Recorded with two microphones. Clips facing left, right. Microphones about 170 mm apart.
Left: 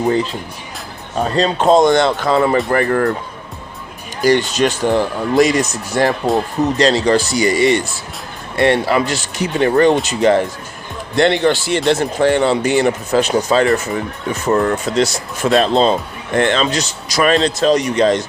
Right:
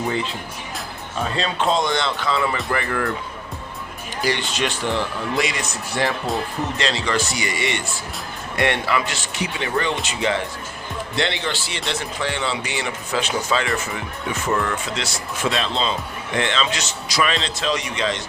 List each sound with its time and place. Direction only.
1.1 s speech: 40° left (ahead or behind)
4.2 s speech: 45° left (ahead or behind)